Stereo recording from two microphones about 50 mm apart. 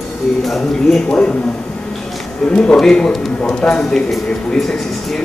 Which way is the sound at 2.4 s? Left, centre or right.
Centre.